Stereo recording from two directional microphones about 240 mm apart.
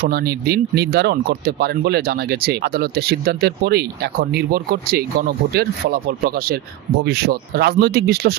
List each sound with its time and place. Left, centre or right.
0.1 s speech: right